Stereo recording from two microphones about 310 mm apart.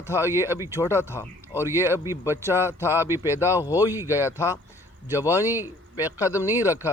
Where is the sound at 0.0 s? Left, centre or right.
Centre.